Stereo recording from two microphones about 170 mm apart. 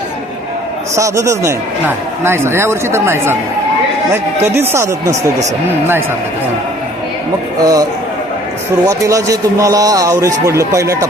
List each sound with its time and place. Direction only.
0.9 s speech: 15° right (ahead or behind)
7.6 s a man's voice: 20° right (ahead or behind)